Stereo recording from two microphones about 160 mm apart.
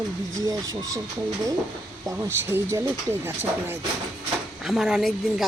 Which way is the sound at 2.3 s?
15° right (ahead or behind).